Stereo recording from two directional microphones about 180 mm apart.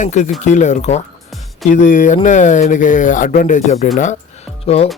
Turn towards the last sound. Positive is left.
turn(degrees=35)  # may be behind; listen again after turning